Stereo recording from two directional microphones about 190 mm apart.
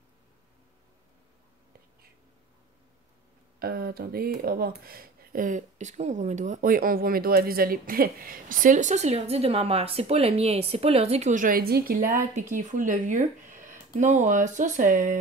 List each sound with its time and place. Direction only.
3.5 s speech: 50° right (ahead or behind)
12.1 s speech: 40° right (ahead or behind)